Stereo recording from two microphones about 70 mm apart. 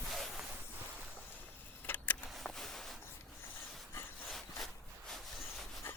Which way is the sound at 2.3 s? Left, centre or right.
Centre.